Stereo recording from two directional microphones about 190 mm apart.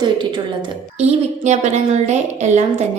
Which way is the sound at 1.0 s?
35° right (ahead or behind).